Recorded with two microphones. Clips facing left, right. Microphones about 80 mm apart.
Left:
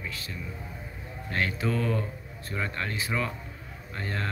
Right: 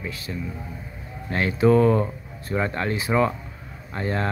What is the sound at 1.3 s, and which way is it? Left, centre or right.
Speech, centre.